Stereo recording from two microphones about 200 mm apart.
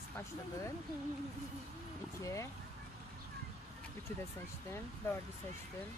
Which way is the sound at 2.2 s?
15° left (ahead or behind).